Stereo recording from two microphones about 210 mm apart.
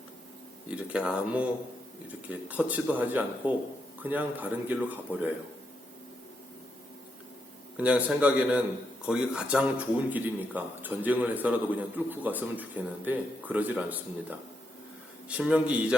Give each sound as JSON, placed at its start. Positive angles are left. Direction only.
{"t": 0.9, "sound": "a man's voice", "side_deg": -5}
{"t": 7.8, "sound": "a man's voice", "side_deg": -5}
{"t": 15.3, "sound": "a man's voice", "side_deg": -5}